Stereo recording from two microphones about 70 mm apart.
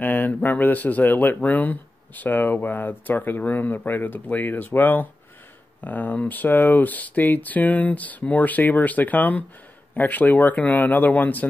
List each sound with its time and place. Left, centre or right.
0.0 s speech: left